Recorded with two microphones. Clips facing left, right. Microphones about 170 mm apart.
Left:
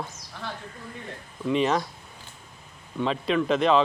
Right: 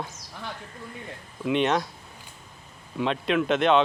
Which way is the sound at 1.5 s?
Centre (ahead or behind).